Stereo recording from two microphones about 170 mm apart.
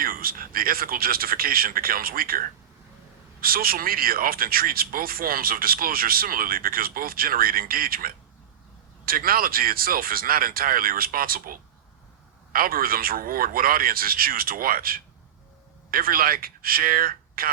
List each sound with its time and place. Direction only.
0.0 s speech: 60° right (ahead or behind)